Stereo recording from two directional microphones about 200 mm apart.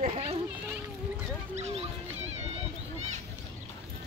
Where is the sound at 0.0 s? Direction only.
30° right (ahead or behind).